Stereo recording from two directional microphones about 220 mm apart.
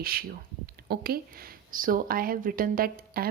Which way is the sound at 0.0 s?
40° right (ahead or behind).